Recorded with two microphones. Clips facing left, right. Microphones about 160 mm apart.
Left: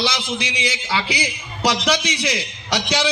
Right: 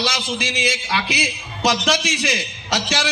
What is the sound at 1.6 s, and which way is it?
Speech, 10° right (ahead or behind).